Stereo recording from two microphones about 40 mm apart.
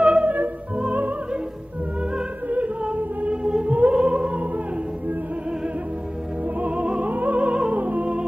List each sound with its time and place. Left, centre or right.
0.0 s music: right
2.5 s music: right
3.9 s music: right
6.6 s music: right